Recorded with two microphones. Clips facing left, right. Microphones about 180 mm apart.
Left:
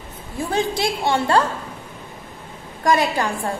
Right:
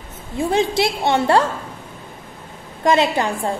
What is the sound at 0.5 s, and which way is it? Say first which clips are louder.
Speech: right 3 dB; 25° right (ahead or behind).